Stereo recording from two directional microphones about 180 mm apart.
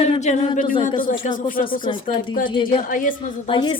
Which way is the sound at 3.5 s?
25° left (ahead or behind).